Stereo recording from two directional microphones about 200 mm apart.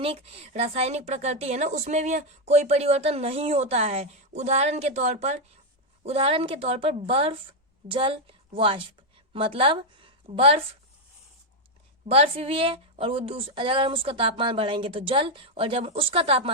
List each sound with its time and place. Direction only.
0.0 s a woman's voice: 30° right (ahead or behind)
12.0 s speech: 30° right (ahead or behind)